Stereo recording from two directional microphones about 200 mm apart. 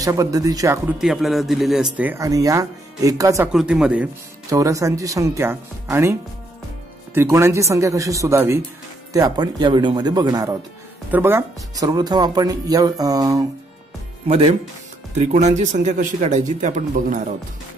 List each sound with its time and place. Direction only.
0.0 s speech: 15° right (ahead or behind)
0.9 s a man's voice: centre (ahead or behind)
2.0 s speech: 10° right (ahead or behind)
3.5 s a man's voice: 5° right (ahead or behind)
4.5 s speech: 15° right (ahead or behind)
7.2 s speech: 15° right (ahead or behind)
14.2 s speech: 30° right (ahead or behind)